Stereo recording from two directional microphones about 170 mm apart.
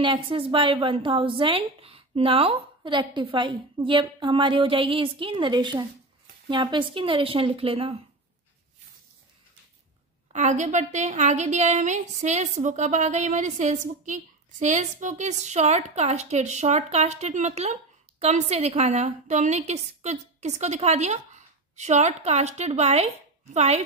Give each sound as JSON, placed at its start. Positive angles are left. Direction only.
{"t": 0.0, "sound": "a woman's voice", "side_deg": -30}
{"t": 10.3, "sound": "a woman's voice", "side_deg": -45}